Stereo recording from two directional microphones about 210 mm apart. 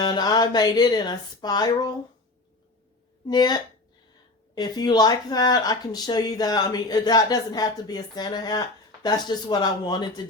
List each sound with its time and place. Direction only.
0.0 s speech: 20° left (ahead or behind)
3.2 s speech: 20° left (ahead or behind)